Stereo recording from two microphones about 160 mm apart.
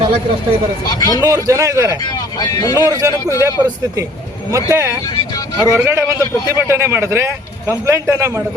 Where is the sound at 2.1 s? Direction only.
25° left (ahead or behind).